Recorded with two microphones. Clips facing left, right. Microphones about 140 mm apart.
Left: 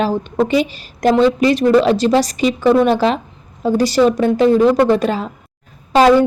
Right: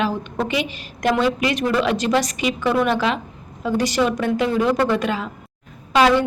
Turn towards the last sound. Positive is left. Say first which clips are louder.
# left 6 dB
turn(degrees=40)  # may be behind; listen again after turning